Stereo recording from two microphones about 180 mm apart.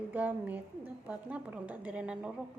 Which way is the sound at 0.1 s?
10° right (ahead or behind).